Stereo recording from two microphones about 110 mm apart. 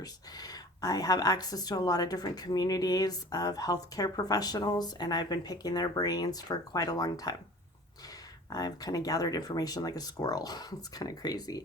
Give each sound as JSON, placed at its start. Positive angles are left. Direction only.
{"t": 0.0, "sound": "speech", "side_deg": 35}
{"t": 8.4, "sound": "speech", "side_deg": 35}